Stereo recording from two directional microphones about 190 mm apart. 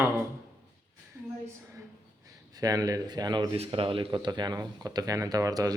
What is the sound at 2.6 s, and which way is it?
Speech, 20° right (ahead or behind).